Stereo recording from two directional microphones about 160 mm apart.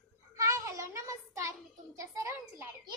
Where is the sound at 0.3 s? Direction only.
20° right (ahead or behind).